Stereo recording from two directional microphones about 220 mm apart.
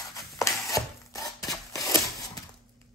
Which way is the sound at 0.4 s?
15° left (ahead or behind).